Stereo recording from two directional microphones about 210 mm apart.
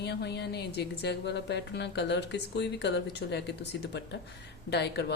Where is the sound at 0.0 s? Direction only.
55° left (ahead or behind).